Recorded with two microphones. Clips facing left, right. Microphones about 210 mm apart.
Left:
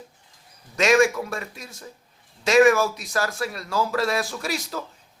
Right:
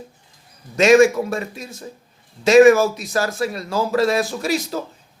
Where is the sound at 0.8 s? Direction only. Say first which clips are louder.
Right 6 dB; 25° right (ahead or behind).